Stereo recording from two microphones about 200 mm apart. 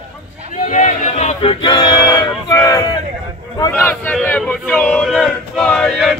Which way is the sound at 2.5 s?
15° left (ahead or behind).